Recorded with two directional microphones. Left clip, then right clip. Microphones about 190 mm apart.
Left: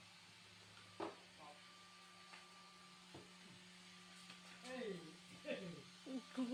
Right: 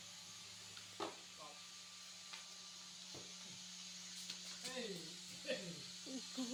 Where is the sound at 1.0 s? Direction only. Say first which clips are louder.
Right 2 dB; 15° left (ahead or behind).